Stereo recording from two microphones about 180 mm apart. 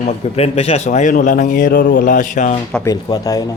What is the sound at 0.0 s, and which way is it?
A man's voice, 35° left (ahead or behind).